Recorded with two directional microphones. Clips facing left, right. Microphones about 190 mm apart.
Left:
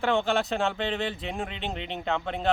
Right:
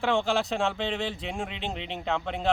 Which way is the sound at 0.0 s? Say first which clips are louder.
Left 1 dB; centre (ahead or behind).